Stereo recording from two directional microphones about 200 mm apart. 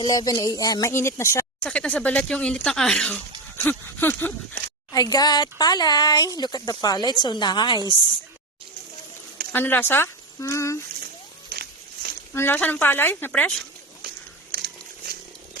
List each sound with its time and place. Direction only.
0.0 s speech: 20° left (ahead or behind)
9.5 s speech: 10° left (ahead or behind)
11.5 s a sound: 55° right (ahead or behind)
12.3 s speech: 10° left (ahead or behind)
14.5 s pig: 50° right (ahead or behind)